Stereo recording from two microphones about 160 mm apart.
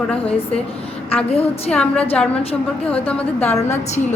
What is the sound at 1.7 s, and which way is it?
Speech, 5° left (ahead or behind).